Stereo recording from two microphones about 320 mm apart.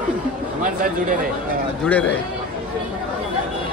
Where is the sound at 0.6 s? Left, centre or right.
Right.